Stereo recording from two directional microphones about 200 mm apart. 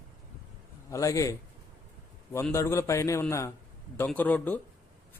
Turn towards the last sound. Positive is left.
turn(degrees=10)  # may be behind; listen again after turning